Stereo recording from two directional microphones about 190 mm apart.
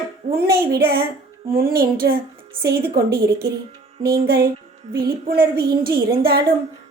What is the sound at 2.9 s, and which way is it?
Speech, 55° right (ahead or behind).